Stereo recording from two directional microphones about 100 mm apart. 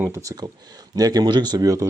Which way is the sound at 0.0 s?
30° right (ahead or behind).